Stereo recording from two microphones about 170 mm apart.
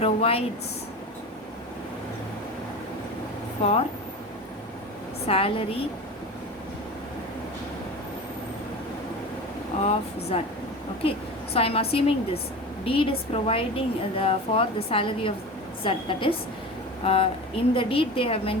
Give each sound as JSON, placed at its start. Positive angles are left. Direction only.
{"t": 0.0, "sound": "a woman's voice", "side_deg": 35}
{"t": 3.6, "sound": "a woman's voice", "side_deg": 35}
{"t": 5.2, "sound": "a woman's voice", "side_deg": 35}
{"t": 9.8, "sound": "a woman's voice", "side_deg": 40}
{"t": 11.5, "sound": "a woman's voice", "side_deg": 35}